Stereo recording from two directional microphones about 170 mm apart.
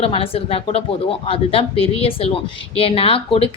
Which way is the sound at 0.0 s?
35° left (ahead or behind).